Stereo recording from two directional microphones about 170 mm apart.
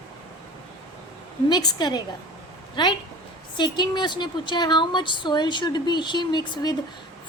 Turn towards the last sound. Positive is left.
turn(degrees=25)  # may be behind; listen again after turning